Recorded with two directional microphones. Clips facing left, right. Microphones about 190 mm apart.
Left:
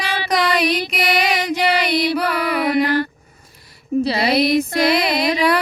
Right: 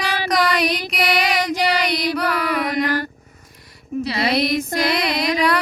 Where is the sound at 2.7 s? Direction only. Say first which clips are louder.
Left 4 dB; 40° right (ahead or behind).